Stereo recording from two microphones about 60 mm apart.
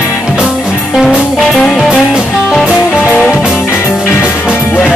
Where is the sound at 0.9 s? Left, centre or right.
Centre.